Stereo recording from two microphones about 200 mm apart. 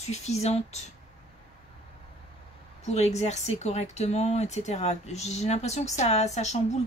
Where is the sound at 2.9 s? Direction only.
35° left (ahead or behind).